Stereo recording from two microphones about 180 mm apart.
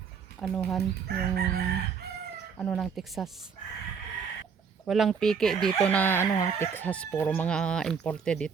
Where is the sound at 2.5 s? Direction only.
5° left (ahead or behind).